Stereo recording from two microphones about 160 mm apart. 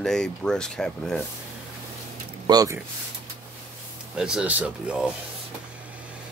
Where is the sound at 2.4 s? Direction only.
25° right (ahead or behind).